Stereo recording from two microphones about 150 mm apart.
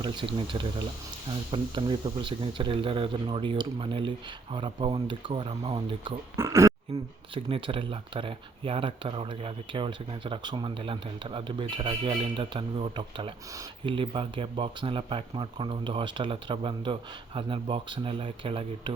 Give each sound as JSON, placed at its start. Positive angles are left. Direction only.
{"t": 0.0, "sound": "speech", "side_deg": -35}
{"t": 6.3, "sound": "speech", "side_deg": -20}
{"t": 7.3, "sound": "speech", "side_deg": -35}